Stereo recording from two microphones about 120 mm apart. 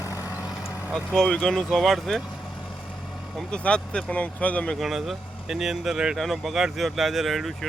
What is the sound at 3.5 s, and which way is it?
Speech, 10° left (ahead or behind).